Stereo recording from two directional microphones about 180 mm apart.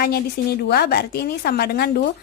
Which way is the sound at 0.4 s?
65° left (ahead or behind).